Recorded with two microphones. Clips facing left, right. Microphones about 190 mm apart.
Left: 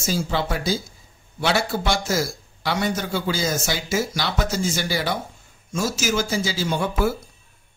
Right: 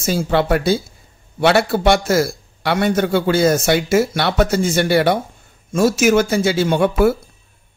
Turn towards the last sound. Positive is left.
turn(degrees=-65)  # may be behind; listen again after turning